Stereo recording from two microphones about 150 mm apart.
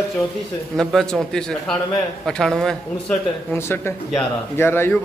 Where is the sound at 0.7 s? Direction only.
5° left (ahead or behind).